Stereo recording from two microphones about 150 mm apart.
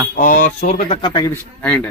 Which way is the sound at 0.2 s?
60° left (ahead or behind).